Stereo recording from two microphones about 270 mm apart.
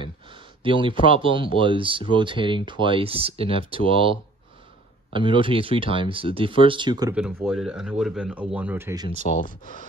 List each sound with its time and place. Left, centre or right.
0.7 s speech: centre
7.4 s speech: centre
9.2 s speech: left